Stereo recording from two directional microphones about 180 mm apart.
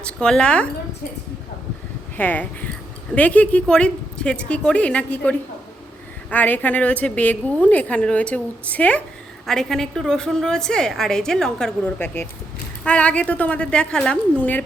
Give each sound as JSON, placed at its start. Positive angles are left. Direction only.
{"t": 0.0, "sound": "a woman's voice", "side_deg": 5}
{"t": 2.1, "sound": "a woman's voice", "side_deg": 10}